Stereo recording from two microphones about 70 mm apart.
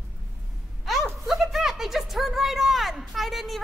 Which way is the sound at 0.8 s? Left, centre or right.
Centre.